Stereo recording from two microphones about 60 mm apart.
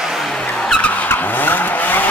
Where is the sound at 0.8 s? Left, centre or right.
Left.